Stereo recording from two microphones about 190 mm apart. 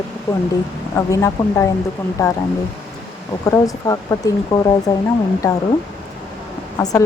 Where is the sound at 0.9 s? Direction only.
15° left (ahead or behind).